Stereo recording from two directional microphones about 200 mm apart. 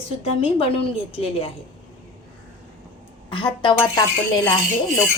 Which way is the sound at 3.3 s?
25° left (ahead or behind).